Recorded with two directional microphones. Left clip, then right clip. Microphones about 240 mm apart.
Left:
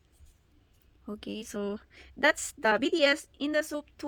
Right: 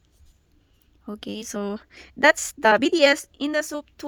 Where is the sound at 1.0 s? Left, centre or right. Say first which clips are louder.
Right 6 dB; right.